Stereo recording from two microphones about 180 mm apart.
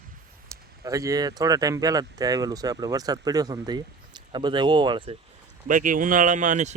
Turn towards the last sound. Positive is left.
turn(degrees=-45)  # may be behind; listen again after turning